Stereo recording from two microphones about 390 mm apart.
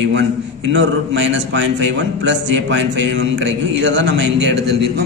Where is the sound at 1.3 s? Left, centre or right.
Right.